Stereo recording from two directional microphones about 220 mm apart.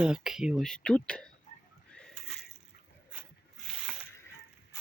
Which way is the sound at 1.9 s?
5° left (ahead or behind).